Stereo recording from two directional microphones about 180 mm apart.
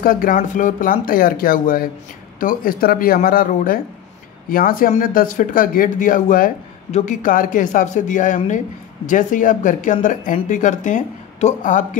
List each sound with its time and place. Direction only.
0.0 s speech: 50° left (ahead or behind)